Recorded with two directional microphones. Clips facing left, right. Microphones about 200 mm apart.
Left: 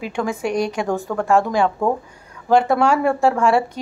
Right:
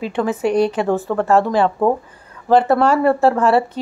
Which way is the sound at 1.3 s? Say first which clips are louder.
Right 1 dB; 10° left (ahead or behind).